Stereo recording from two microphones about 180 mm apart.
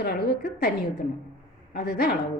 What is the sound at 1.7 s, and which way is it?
Speech, 60° left (ahead or behind).